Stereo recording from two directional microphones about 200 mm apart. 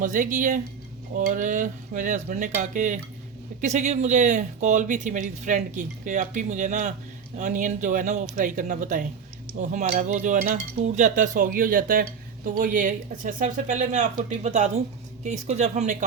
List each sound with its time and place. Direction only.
0.0 s speech: 40° right (ahead or behind)